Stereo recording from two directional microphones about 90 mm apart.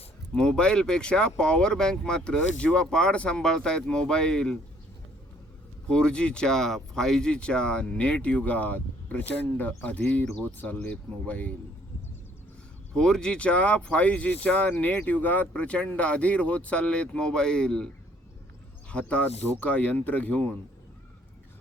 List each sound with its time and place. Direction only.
0.3 s speech: 10° left (ahead or behind)
5.9 s speech: 10° left (ahead or behind)
12.9 s speech: 10° left (ahead or behind)